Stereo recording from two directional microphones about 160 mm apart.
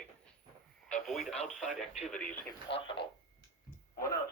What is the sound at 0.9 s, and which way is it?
Radio, centre (ahead or behind).